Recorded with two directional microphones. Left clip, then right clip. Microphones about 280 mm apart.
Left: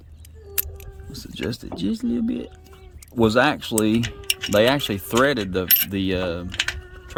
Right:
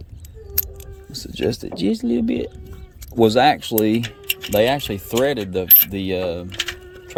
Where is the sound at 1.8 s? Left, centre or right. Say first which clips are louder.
Right 5 dB; centre.